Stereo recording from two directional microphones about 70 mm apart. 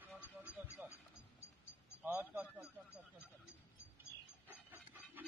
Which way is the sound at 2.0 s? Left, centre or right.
Right.